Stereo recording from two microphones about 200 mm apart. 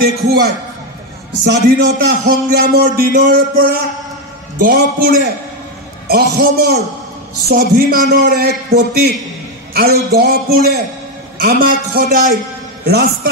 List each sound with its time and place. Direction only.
1.4 s a man's voice: 60° right (ahead or behind); by 12.4 s 40° right (ahead or behind)
12.8 s a man's voice: 50° right (ahead or behind)